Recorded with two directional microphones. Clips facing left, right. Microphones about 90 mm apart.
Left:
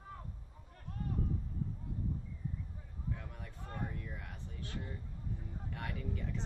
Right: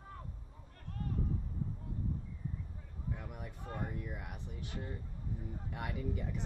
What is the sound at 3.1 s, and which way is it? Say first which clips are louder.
Speech: right 1 dB; 15° right (ahead or behind).